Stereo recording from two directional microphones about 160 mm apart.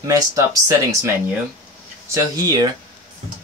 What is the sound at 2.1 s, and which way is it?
Speech, 20° right (ahead or behind).